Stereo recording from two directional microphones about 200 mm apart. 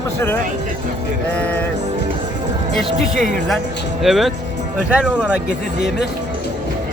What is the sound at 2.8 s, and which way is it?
Speech, 40° right (ahead or behind).